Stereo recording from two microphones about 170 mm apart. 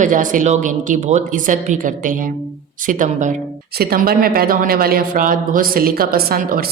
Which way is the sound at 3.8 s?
60° right (ahead or behind).